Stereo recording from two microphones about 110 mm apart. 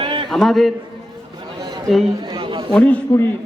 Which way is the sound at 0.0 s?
50° right (ahead or behind).